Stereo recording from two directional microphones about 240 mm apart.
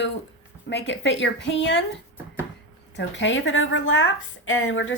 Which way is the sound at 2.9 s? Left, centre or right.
Left.